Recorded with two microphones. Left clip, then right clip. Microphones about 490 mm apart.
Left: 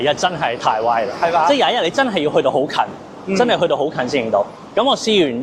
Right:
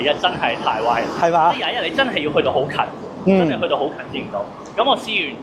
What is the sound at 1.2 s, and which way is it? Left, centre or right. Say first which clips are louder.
Speech: right 1 dB; right.